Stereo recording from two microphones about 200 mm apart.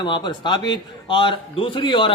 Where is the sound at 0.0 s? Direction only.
20° left (ahead or behind).